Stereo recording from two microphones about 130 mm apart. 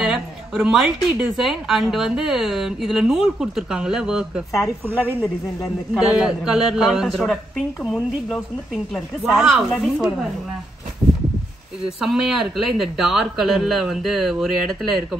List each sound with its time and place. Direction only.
0.0 s a woman's voice: 5° right (ahead or behind)
4.8 s a woman's voice: 15° right (ahead or behind)
6.1 s a woman's voice: 5° right (ahead or behind)
12.0 s a woman's voice: 5° right (ahead or behind)